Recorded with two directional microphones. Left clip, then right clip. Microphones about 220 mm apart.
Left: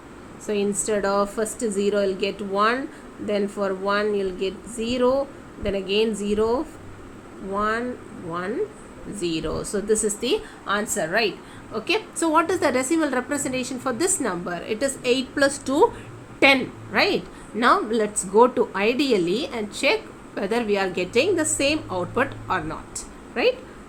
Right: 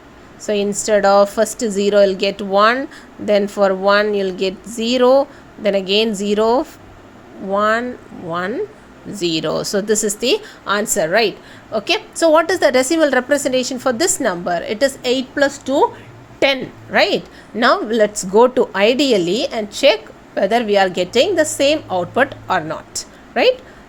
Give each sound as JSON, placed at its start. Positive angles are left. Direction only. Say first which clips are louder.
{"t": 0.4, "sound": "a woman's voice", "louder": "right 6 dB", "side_deg": -30}
{"t": 16.4, "sound": "a woman's voice", "louder": "right 1 dB", "side_deg": -30}